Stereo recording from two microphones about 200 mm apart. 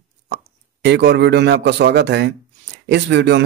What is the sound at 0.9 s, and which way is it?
Speech, 55° right (ahead or behind).